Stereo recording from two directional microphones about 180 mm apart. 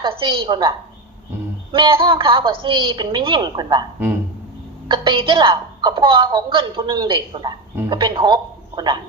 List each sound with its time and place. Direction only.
0.2 s a woman's voice: 30° right (ahead or behind)
1.7 s a woman's voice: 30° right (ahead or behind)
4.9 s a woman's voice: 25° right (ahead or behind)